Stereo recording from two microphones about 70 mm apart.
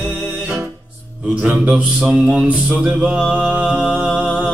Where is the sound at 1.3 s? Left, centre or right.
Centre.